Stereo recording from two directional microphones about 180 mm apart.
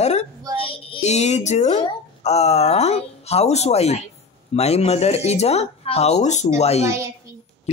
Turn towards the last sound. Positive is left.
turn(degrees=35)  # may be behind; listen again after turning